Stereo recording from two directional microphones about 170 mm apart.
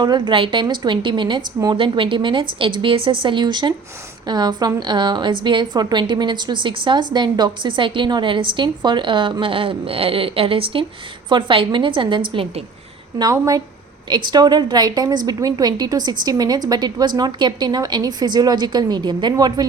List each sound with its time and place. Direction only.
0.0 s a woman's voice: 25° right (ahead or behind)
13.1 s a woman's voice: 20° right (ahead or behind)